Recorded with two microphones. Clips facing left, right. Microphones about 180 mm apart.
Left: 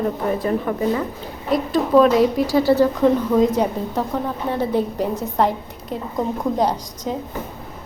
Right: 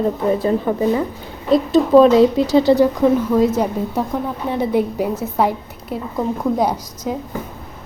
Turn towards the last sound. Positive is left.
turn(degrees=-5)  # may be behind; listen again after turning